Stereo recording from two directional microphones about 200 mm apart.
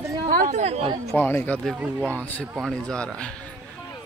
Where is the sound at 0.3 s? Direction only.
40° right (ahead or behind).